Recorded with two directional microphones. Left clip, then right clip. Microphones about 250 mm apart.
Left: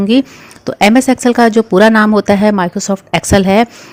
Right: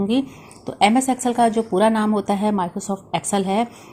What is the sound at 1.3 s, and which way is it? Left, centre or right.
A woman's voice, left.